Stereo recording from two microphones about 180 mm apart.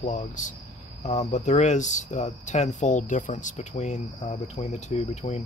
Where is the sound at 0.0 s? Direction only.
45° left (ahead or behind).